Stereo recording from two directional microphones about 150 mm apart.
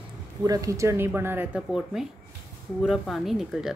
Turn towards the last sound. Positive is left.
turn(degrees=0)  # may be behind; listen again after turning